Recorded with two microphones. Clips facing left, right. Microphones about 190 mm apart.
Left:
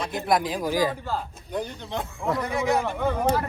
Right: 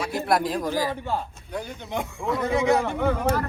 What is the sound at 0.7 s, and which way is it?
Speech, 15° left (ahead or behind).